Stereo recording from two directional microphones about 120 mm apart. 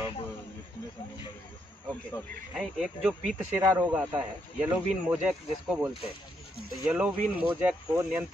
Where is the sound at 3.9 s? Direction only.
10° right (ahead or behind).